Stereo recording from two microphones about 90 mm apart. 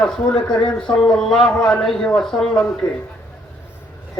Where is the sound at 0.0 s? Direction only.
10° left (ahead or behind).